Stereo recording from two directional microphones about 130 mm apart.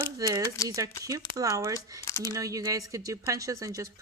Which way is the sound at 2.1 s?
25° left (ahead or behind).